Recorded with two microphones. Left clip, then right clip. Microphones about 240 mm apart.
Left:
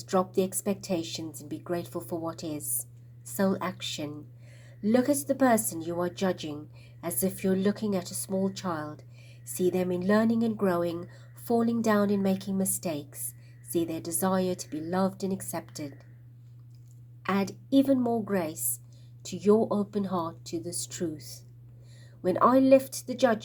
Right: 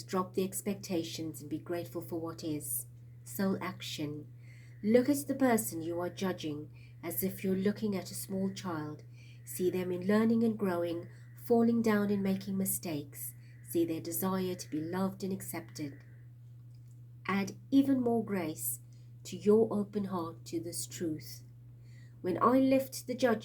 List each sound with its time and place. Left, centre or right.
0.0 s speech: left
17.2 s speech: left